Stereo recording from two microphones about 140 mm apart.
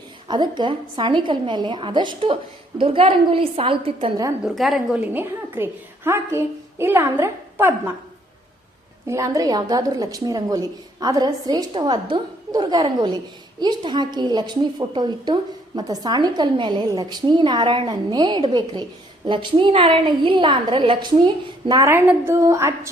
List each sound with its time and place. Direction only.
0.3 s a woman's voice: 30° right (ahead or behind)
4.4 s a woman's voice: centre (ahead or behind)
4.9 s a woman's voice: 15° right (ahead or behind)
9.0 s a woman's voice: 25° right (ahead or behind)
21.7 s a woman's voice: 20° right (ahead or behind)